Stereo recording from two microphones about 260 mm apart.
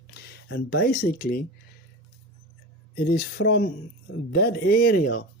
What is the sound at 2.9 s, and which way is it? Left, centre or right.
Speech, left.